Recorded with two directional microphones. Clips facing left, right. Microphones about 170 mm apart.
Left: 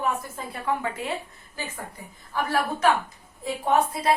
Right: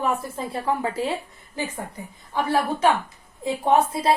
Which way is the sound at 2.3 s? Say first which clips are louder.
Right 3 dB; 25° right (ahead or behind).